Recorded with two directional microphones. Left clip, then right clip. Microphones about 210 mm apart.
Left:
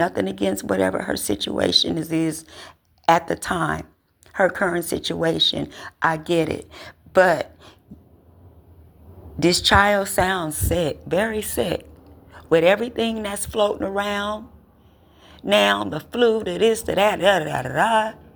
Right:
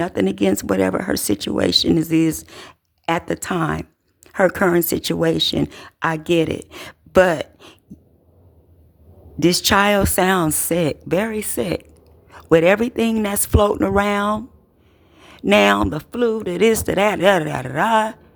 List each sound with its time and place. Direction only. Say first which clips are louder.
0.0 s speech: right 2 dB; 30° right (ahead or behind)
7.3 s speech: even; 60° right (ahead or behind)
9.6 s speech: even; 30° right (ahead or behind)